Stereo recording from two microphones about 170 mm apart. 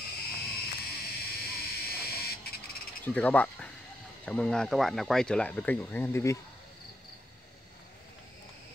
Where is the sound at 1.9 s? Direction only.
65° left (ahead or behind).